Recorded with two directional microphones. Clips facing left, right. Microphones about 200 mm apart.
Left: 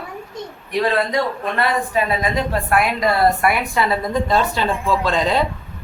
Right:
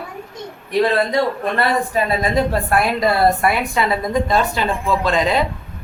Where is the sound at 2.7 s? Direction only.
30° right (ahead or behind).